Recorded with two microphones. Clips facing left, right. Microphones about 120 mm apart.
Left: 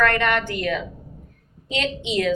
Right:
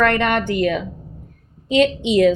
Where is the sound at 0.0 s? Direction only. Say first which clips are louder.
Right 3 dB; 20° right (ahead or behind).